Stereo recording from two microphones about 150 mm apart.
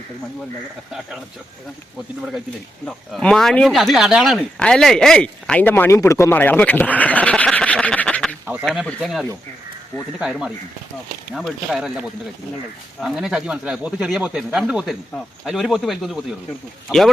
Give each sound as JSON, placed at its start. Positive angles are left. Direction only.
{"t": 2.8, "sound": "speech", "side_deg": 5}
{"t": 11.3, "sound": "speech", "side_deg": 0}